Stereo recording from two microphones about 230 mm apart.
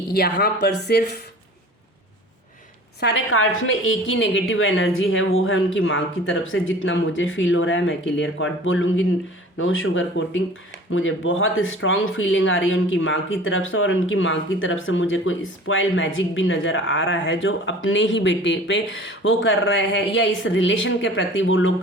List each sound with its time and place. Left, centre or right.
0.1 s speech: left
3.0 s speech: left